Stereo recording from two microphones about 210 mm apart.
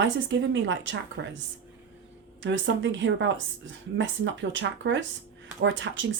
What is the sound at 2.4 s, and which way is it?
Speech, 60° right (ahead or behind).